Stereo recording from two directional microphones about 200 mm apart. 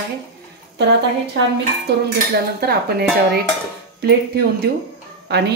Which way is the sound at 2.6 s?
50° right (ahead or behind).